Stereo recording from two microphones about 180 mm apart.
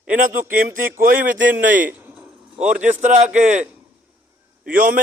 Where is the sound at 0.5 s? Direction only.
50° right (ahead or behind).